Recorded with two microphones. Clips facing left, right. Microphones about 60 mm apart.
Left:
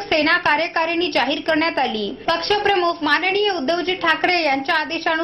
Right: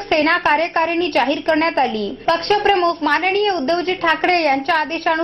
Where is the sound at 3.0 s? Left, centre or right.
Right.